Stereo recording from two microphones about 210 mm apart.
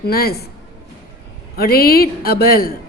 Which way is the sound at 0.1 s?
45° left (ahead or behind).